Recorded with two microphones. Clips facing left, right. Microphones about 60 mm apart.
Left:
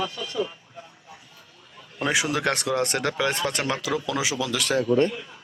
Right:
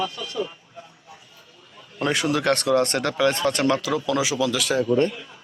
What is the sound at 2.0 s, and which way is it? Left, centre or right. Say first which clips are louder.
Speech: right 2 dB; centre.